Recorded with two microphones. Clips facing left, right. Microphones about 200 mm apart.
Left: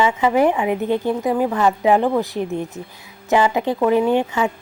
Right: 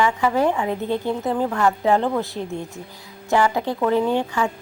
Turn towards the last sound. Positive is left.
turn(degrees=20)  # may be behind; listen again after turning